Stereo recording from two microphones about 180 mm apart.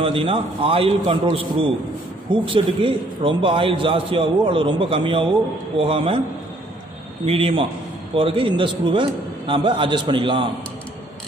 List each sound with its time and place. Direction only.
0.0 s a man's voice: 30° right (ahead or behind)
7.2 s a man's voice: 30° right (ahead or behind)